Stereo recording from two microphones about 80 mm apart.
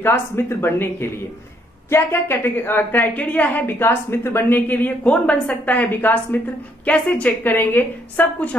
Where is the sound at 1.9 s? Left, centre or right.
Left.